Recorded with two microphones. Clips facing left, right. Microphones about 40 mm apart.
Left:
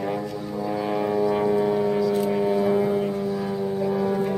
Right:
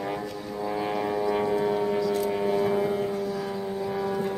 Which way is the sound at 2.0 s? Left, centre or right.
Centre.